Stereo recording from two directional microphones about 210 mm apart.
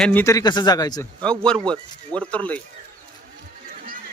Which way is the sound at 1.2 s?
5° left (ahead or behind).